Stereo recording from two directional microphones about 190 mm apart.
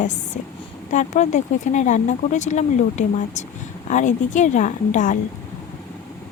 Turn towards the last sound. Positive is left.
turn(degrees=40)  # may be behind; listen again after turning